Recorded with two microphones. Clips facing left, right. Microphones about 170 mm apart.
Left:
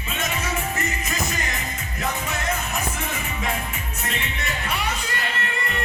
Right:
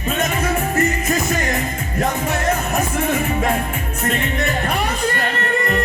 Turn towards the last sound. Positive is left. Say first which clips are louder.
# right 9 dB
turn(degrees=-45)  # may be behind; listen again after turning